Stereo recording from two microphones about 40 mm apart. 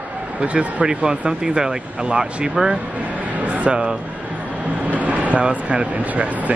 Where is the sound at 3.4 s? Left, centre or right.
Right.